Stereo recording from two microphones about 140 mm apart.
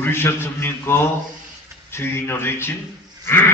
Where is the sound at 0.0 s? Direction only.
15° left (ahead or behind).